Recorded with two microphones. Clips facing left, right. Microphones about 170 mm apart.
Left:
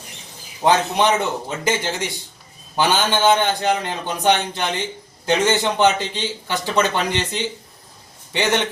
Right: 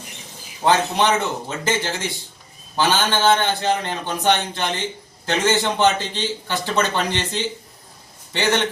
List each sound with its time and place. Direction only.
0.6 s a man's voice: 15° left (ahead or behind)